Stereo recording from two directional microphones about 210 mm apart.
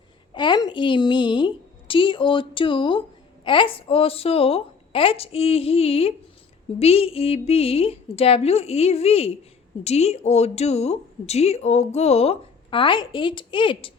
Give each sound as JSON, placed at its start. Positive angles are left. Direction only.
{"t": 0.3, "sound": "a woman's voice", "side_deg": 20}